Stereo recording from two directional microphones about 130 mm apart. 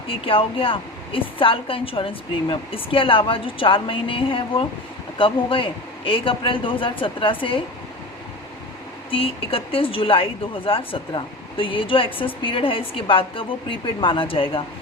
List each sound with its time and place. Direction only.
0.1 s a woman's voice: 45° left (ahead or behind)
9.0 s a woman's voice: 45° left (ahead or behind)